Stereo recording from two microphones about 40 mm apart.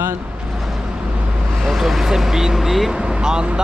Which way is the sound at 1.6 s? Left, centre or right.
Centre.